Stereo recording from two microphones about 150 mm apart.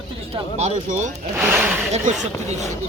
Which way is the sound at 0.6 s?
55° right (ahead or behind).